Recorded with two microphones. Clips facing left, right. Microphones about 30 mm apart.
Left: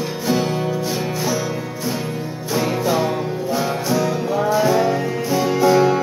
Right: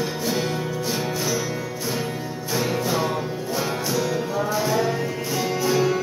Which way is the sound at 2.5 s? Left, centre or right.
Centre.